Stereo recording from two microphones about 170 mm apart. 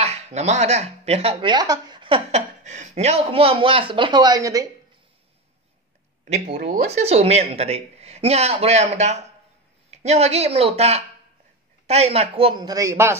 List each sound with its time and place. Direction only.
0.0 s speech: 40° right (ahead or behind); by 4.6 s 20° right (ahead or behind)
6.2 s speech: 45° right (ahead or behind)
6.5 s speech: 60° right (ahead or behind)
6.9 s speech: 40° right (ahead or behind); by 13.2 s 15° right (ahead or behind)